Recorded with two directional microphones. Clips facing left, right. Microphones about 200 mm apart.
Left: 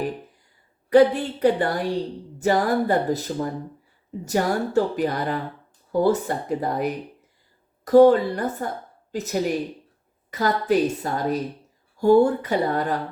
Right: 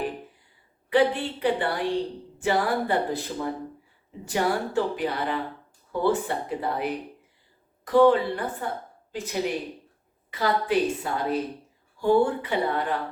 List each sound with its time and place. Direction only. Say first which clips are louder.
0.9 s a woman's voice: left 6 dB; 40° left (ahead or behind)